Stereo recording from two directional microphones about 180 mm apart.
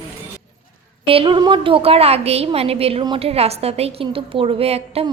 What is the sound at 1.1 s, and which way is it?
A woman's voice, 30° right (ahead or behind).